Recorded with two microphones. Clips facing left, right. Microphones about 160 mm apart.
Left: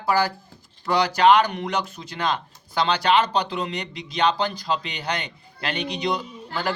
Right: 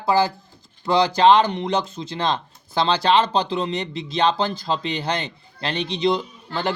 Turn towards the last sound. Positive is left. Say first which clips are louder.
# right 2 dB
turn(degrees=-25)  # may be behind; listen again after turning